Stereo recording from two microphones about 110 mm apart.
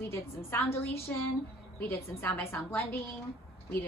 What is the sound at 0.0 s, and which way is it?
Speech, 20° left (ahead or behind).